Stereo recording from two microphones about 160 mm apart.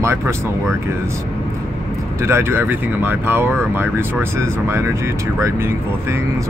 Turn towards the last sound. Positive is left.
turn(degrees=-15)  # may be behind; listen again after turning